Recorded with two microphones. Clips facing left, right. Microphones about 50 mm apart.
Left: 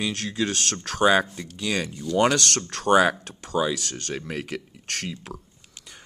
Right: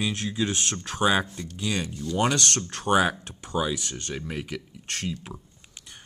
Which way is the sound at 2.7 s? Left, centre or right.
Left.